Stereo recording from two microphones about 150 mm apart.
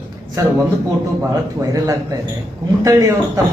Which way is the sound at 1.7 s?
25° right (ahead or behind).